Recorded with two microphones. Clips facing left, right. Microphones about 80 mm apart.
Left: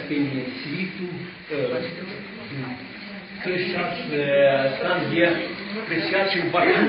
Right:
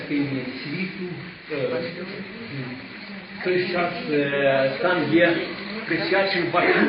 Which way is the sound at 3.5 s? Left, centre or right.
Right.